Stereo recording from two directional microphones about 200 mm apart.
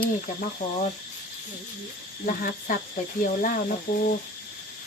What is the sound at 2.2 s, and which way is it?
Speech, 45° left (ahead or behind).